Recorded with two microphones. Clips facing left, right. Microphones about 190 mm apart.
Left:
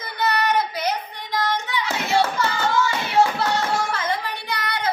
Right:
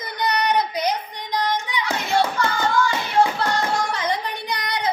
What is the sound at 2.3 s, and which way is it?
Hands, 5° left (ahead or behind).